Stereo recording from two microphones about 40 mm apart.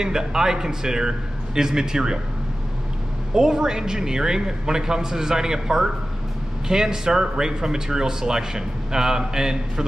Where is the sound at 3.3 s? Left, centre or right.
Centre.